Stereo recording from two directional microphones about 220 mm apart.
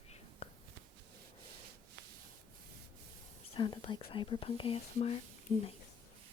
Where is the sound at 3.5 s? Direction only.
20° left (ahead or behind).